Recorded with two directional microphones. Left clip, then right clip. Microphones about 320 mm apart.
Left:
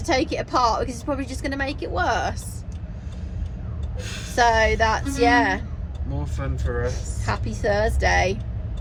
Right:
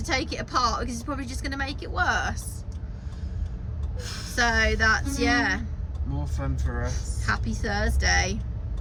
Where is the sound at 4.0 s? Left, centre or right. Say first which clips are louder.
Left 3 dB; centre.